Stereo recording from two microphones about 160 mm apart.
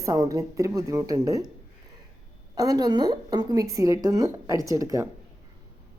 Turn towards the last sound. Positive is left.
turn(degrees=-20)  # may be behind; listen again after turning